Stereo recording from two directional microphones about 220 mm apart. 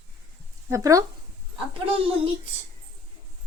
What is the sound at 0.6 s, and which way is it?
Speech, 15° right (ahead or behind).